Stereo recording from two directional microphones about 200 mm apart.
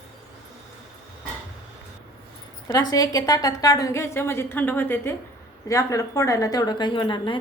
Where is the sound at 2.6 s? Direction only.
20° left (ahead or behind).